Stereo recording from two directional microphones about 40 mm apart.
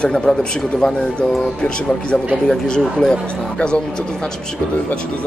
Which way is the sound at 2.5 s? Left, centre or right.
Centre.